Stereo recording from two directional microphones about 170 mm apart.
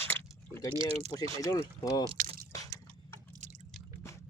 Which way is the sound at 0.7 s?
35° right (ahead or behind).